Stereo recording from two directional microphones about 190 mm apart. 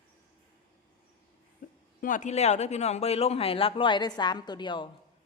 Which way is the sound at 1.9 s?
45° left (ahead or behind).